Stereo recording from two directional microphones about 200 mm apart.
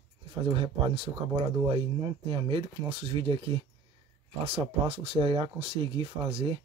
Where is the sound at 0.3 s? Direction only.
25° right (ahead or behind).